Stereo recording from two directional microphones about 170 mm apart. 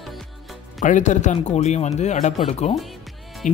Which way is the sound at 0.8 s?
45° left (ahead or behind).